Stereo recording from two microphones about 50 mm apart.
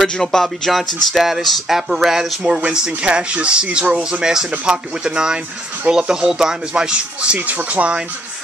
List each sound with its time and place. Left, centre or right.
0.0 s speech: centre
7.3 s speech: right